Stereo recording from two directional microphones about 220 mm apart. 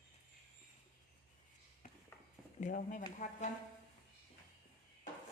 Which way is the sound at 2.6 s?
35° left (ahead or behind).